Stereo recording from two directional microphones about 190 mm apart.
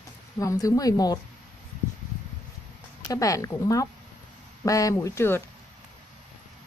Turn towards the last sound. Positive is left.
turn(degrees=15)  # may be behind; listen again after turning